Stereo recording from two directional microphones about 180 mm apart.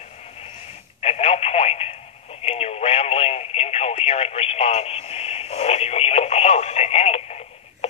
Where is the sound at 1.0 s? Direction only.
35° left (ahead or behind).